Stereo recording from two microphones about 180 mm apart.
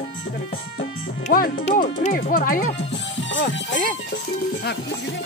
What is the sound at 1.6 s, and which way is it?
Speech, 45° left (ahead or behind).